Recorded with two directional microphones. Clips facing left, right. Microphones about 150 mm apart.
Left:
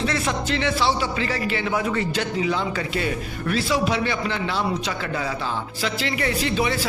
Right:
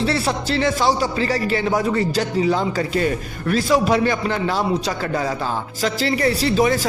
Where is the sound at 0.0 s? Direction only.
35° right (ahead or behind).